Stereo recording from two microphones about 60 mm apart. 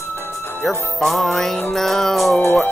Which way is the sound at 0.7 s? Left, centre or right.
Centre.